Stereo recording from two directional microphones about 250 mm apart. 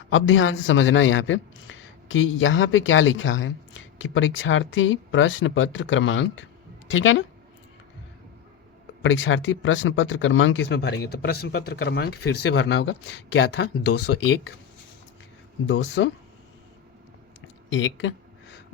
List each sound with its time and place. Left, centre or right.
0.1 s a woman's voice: left
9.0 s speech: left
15.6 s speech: left
17.7 s a sound: left